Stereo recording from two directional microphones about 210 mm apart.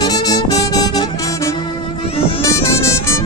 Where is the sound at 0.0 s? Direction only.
20° left (ahead or behind).